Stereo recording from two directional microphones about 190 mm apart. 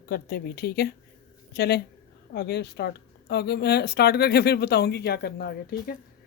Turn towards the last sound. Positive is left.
turn(degrees=55)  # may be behind; listen again after turning